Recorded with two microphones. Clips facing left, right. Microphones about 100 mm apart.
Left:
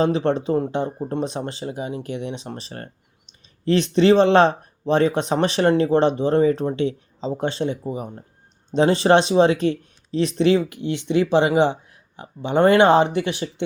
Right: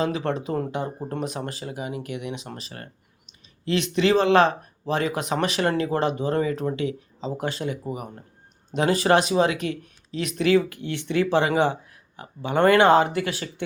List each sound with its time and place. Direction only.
0.0 s speech: 30° left (ahead or behind)